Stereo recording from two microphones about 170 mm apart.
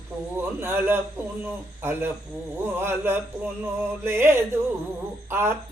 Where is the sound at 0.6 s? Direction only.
15° right (ahead or behind).